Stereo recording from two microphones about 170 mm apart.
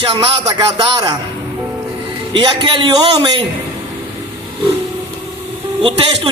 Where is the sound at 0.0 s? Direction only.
30° right (ahead or behind).